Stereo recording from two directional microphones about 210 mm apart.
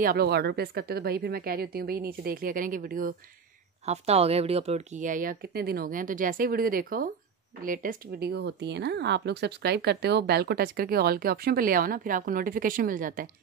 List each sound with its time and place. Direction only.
0.0 s speech: 45° right (ahead or behind)
3.8 s speech: 30° right (ahead or behind)